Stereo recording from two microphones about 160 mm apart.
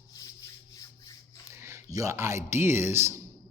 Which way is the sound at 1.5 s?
20° right (ahead or behind).